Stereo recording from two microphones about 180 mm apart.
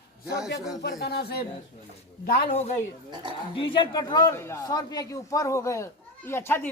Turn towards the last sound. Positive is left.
turn(degrees=15)  # may be behind; listen again after turning